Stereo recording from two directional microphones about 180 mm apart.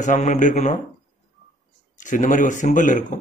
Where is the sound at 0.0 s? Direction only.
40° left (ahead or behind).